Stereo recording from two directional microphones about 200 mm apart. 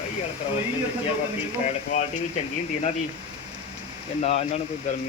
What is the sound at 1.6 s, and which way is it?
Speech, 35° left (ahead or behind).